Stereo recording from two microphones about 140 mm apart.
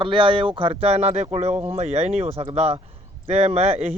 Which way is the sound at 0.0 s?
35° right (ahead or behind).